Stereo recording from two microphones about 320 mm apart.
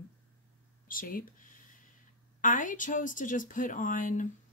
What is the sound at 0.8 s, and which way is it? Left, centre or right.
Speech, left.